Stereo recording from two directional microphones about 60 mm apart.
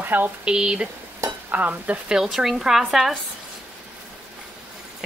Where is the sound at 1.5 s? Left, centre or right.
Right.